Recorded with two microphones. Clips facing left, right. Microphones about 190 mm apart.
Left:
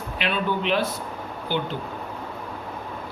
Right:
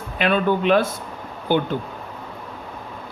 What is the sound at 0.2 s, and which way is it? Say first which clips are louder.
Speech: right 6 dB; 50° right (ahead or behind).